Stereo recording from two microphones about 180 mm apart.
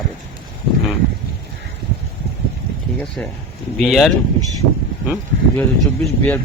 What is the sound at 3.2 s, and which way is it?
Speech, 10° left (ahead or behind).